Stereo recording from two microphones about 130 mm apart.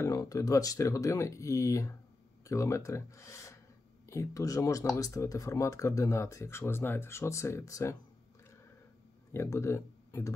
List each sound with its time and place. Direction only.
0.0 s speech: 25° left (ahead or behind)
9.3 s speech: 20° left (ahead or behind)